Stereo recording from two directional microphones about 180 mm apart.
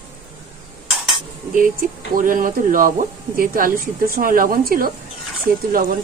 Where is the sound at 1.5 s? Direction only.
50° right (ahead or behind).